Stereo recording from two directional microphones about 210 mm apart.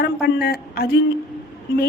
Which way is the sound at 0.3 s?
50° left (ahead or behind).